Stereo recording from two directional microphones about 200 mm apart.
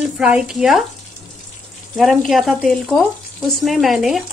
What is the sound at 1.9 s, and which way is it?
Speech, centre (ahead or behind).